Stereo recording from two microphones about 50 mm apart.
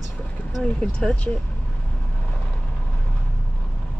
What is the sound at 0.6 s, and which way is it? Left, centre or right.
Speech, centre.